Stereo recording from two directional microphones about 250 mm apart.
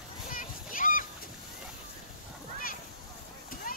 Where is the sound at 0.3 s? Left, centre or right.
Left.